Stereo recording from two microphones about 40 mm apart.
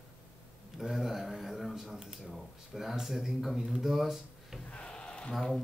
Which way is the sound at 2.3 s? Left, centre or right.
Centre.